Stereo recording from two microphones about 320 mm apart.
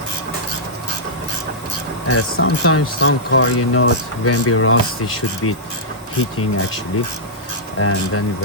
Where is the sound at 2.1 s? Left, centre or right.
Left.